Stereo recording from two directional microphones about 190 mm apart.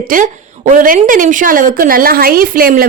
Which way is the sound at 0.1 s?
45° right (ahead or behind).